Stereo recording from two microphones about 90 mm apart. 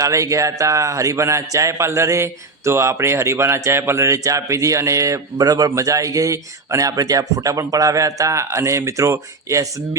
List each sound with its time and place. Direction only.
0.0 s a man's voice: 35° right (ahead or behind)